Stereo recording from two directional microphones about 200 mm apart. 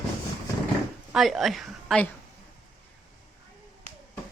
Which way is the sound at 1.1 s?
Centre (ahead or behind).